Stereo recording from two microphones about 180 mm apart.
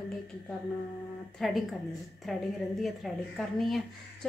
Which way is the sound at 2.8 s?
Centre (ahead or behind).